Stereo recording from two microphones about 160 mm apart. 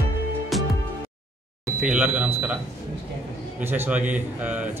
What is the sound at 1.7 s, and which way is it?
Speech, 5° right (ahead or behind).